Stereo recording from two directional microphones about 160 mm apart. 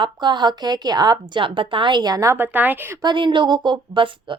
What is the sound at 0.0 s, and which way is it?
Speech, 30° right (ahead or behind).